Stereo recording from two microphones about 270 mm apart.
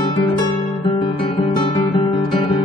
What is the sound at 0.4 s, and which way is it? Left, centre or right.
Guitar, centre.